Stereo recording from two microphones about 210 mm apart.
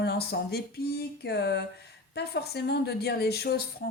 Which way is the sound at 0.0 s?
50° left (ahead or behind).